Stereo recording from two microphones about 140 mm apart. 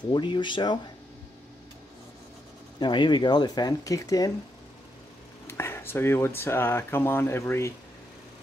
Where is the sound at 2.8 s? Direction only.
35° left (ahead or behind).